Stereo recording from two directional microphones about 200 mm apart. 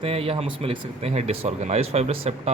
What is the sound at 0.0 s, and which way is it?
A man's voice, 30° right (ahead or behind).